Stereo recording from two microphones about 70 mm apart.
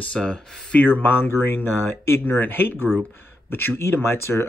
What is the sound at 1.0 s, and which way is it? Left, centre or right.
Speech, left.